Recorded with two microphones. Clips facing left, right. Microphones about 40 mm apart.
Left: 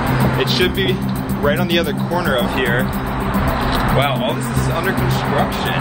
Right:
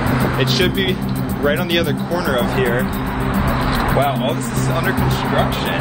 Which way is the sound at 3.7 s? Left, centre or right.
Left.